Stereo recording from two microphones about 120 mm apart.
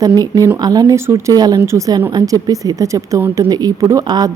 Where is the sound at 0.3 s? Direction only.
30° right (ahead or behind).